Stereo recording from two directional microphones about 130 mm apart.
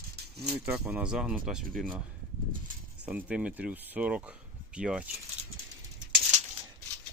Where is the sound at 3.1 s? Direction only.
10° right (ahead or behind).